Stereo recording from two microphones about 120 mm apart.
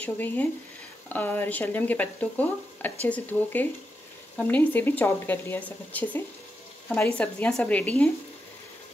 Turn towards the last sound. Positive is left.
turn(degrees=5)  # may be behind; listen again after turning